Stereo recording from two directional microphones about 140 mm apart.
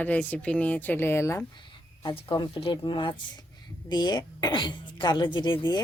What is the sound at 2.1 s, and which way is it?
A woman's voice, 35° left (ahead or behind).